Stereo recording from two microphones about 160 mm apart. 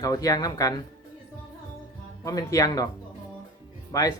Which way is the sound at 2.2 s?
20° left (ahead or behind).